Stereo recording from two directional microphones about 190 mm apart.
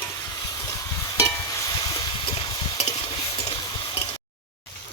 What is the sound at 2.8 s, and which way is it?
Stir, 30° left (ahead or behind).